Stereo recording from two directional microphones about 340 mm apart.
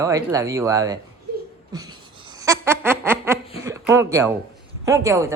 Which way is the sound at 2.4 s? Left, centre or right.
Centre.